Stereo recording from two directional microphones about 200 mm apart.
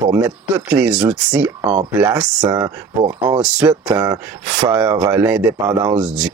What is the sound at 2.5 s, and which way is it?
Speech, 20° right (ahead or behind).